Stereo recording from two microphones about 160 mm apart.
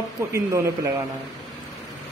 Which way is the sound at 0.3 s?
20° right (ahead or behind).